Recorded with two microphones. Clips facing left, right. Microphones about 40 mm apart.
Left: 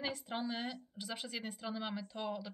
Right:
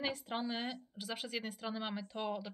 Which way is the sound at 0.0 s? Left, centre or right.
Centre.